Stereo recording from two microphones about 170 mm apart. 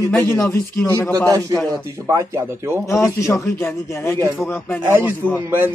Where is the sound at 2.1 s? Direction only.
15° right (ahead or behind).